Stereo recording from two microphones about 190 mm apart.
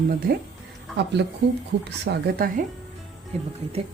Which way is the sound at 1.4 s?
70° right (ahead or behind).